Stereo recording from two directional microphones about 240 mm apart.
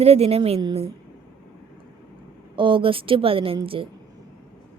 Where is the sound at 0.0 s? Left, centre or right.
Right.